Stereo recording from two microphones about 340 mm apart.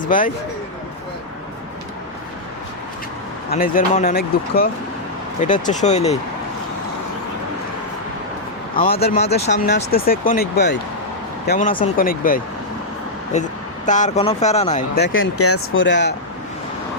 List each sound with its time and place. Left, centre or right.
0.0 s speech: left
3.5 s speech: left
8.7 s speech: left